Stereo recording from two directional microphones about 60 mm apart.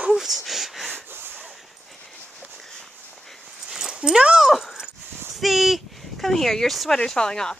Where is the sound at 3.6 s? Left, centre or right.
Centre.